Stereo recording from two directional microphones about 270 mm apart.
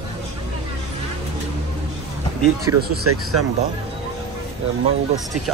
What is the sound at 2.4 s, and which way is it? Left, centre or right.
Speech, right.